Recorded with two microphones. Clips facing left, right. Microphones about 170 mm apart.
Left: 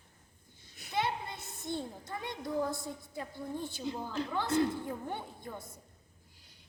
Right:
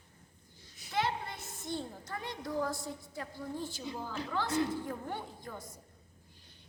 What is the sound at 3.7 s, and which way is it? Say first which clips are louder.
Speech: left 3 dB; 20° left (ahead or behind).